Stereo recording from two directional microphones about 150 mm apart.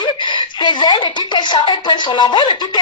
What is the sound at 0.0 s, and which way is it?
Speech, 30° left (ahead or behind).